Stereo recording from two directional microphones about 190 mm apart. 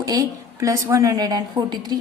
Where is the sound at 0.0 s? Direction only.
20° right (ahead or behind).